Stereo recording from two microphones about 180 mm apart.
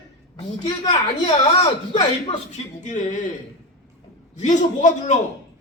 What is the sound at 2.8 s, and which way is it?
Speech, 45° left (ahead or behind).